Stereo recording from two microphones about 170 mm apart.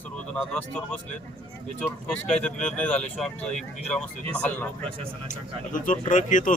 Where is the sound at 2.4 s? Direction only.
5° left (ahead or behind).